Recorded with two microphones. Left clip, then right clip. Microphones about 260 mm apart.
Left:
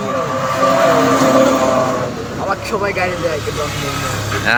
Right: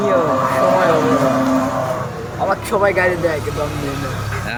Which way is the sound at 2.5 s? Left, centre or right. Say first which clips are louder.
Right 3 dB; right.